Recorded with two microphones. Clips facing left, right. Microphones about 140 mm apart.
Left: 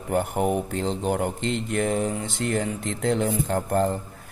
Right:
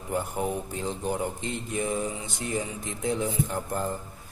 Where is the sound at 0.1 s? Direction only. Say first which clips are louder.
Left 6 dB; 65° left (ahead or behind).